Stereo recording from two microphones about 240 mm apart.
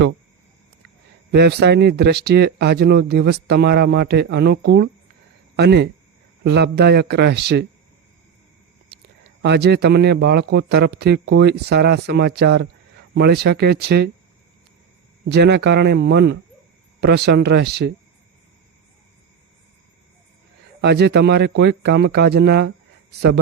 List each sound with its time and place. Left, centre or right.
1.3 s speech: right
9.4 s speech: right
15.3 s speech: right
20.8 s speech: right